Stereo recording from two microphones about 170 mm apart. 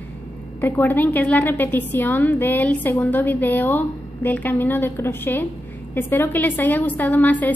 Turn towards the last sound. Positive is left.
turn(degrees=10)  # may be behind; listen again after turning